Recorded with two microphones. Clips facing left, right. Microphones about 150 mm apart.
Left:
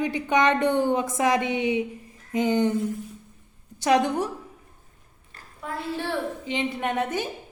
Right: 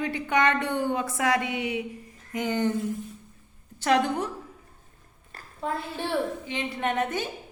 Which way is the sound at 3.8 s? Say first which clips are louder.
Left 2 dB; 15° left (ahead or behind).